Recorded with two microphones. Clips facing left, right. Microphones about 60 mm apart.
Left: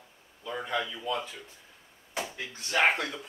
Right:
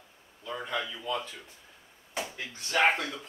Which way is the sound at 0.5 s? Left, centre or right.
Centre.